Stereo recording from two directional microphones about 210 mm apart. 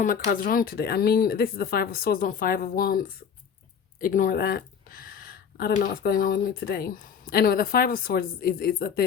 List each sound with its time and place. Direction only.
0.0 s speech: 40° left (ahead or behind)